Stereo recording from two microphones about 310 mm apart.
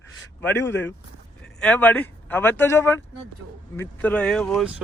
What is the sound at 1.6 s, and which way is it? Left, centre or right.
Speech, centre.